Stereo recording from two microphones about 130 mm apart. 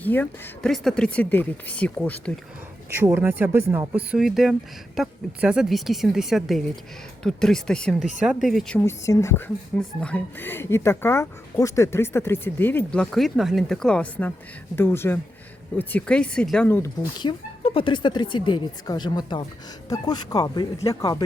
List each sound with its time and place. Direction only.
0.0 s speech: 15° left (ahead or behind)
2.9 s speech: 20° right (ahead or behind)
4.1 s a woman's voice: 5° right (ahead or behind)
8.2 s a woman's voice: 5° right (ahead or behind)
8.8 s speech: 25° left (ahead or behind)
17.2 s speech: 40° left (ahead or behind)